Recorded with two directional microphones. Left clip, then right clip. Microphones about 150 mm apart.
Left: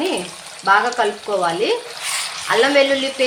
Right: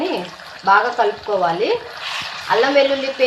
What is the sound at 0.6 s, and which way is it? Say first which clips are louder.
Speech: right 1 dB; 35° left (ahead or behind).